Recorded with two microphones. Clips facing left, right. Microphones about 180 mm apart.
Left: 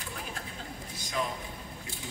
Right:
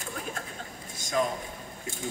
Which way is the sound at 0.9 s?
45° right (ahead or behind).